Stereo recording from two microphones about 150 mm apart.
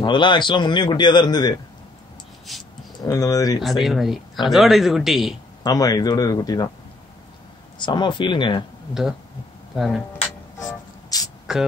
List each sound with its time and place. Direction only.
0.0 s a man's voice: 30° left (ahead or behind)
2.5 s speech: centre (ahead or behind)
3.0 s a man's voice: 25° left (ahead or behind)
3.5 s speech: centre (ahead or behind)
5.6 s a man's voice: 25° left (ahead or behind)
7.8 s a man's voice: 30° left (ahead or behind)
9.8 s speech: centre (ahead or behind)
11.1 s a sound: 25° left (ahead or behind)
11.5 s speech: 5° right (ahead or behind)